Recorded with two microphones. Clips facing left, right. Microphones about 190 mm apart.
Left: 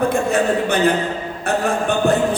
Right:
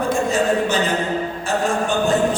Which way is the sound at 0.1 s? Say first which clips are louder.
Left 1 dB; 60° left (ahead or behind).